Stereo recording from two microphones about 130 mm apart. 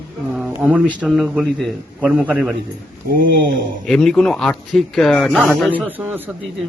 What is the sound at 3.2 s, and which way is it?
Speech, 90° right.